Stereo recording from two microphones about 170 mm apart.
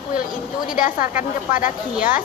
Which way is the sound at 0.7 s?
50° left (ahead or behind).